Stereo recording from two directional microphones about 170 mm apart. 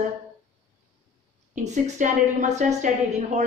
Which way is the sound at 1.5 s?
45° right (ahead or behind).